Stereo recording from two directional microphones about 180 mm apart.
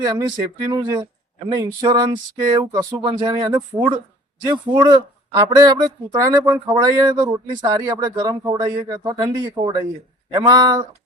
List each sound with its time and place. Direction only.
0.0 s speech: 20° right (ahead or behind)